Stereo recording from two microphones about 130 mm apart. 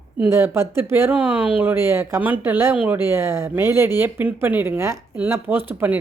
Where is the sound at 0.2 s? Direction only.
20° right (ahead or behind).